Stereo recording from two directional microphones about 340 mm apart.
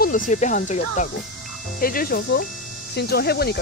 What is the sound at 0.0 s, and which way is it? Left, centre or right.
Speech, left.